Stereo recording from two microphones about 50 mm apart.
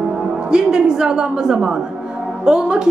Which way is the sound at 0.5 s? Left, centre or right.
Centre.